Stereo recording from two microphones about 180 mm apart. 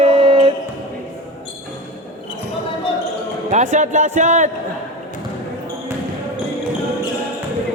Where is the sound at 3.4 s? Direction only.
40° right (ahead or behind).